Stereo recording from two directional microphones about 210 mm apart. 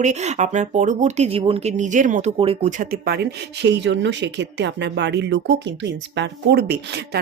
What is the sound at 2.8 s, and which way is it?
Speech, 45° right (ahead or behind).